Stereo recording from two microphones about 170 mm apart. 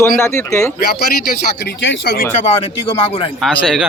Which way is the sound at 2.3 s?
45° left (ahead or behind).